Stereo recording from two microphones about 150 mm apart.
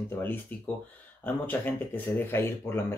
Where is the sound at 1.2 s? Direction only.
10° left (ahead or behind).